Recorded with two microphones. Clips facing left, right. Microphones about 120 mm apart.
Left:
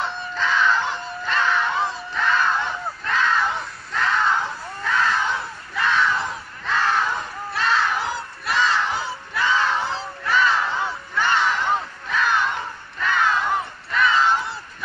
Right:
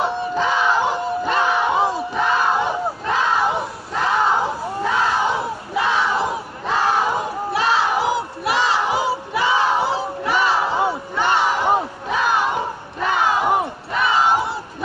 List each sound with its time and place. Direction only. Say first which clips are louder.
0.0 s battle cry: right 6 dB; 15° right (ahead or behind)
6.7 s crowd: right 3 dB; 15° right (ahead or behind)
9.8 s battle cry: right 5 dB; 15° right (ahead or behind)